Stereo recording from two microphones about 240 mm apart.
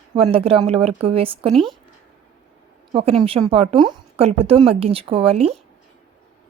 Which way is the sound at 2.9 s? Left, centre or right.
Right.